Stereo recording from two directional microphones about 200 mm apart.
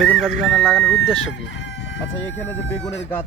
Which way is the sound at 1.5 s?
65° left (ahead or behind).